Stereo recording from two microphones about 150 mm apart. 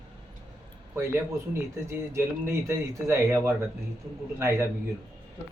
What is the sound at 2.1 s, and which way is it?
Speech, 20° right (ahead or behind).